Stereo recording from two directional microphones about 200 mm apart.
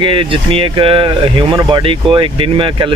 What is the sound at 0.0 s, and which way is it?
Speech, 25° right (ahead or behind).